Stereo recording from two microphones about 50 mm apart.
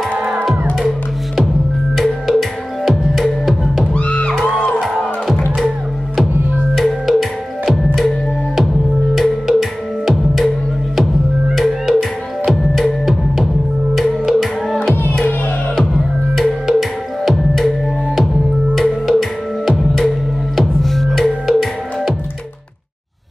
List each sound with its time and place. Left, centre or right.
0.7 s music: centre
3.9 s music: left
4.5 s music: centre
6.8 s music: centre
9.1 s music: centre
11.5 s music: centre
17.2 s music: centre